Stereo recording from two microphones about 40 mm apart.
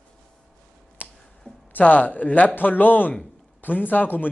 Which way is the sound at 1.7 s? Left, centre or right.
Left.